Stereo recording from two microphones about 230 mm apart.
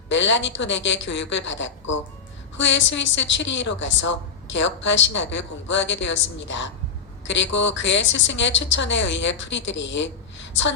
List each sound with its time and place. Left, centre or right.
0.1 s a woman's voice: left